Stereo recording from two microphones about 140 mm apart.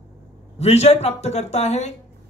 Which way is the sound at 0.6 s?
50° left (ahead or behind).